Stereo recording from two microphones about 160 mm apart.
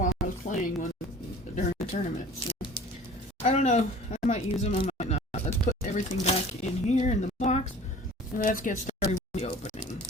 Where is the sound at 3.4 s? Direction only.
45° left (ahead or behind).